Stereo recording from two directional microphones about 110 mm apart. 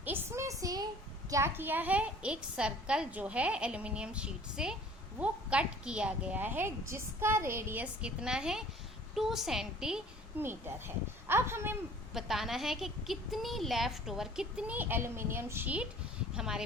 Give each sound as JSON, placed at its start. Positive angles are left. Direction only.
{"t": 0.0, "sound": "a woman's voice", "side_deg": -20}
{"t": 10.3, "sound": "speech", "side_deg": -20}
{"t": 12.1, "sound": "a woman's voice", "side_deg": 0}